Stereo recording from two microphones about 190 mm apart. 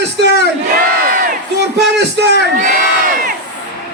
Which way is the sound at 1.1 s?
45° right (ahead or behind).